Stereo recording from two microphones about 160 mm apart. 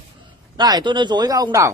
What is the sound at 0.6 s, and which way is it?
Speech, 25° right (ahead or behind).